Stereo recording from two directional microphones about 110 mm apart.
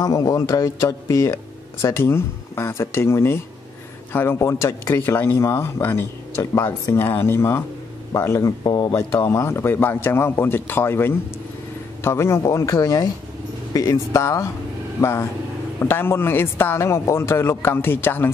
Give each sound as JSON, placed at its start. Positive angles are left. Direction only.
{"t": 0.0, "sound": "speech", "side_deg": 35}
{"t": 8.6, "sound": "speech", "side_deg": 40}
{"t": 8.9, "sound": "speech", "side_deg": 25}